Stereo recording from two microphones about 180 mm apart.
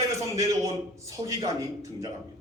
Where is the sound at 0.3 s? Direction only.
20° right (ahead or behind).